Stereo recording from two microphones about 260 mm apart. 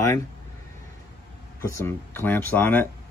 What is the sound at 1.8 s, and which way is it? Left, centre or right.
Speech, centre.